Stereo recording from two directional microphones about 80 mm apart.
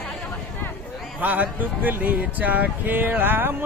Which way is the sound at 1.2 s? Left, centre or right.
Right.